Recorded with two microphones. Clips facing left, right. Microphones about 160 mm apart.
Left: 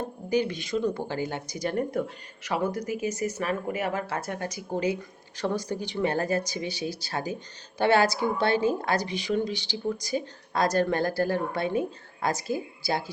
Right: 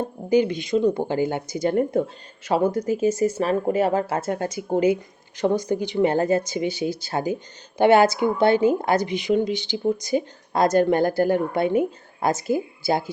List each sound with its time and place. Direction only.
0.3 s speech: 20° right (ahead or behind)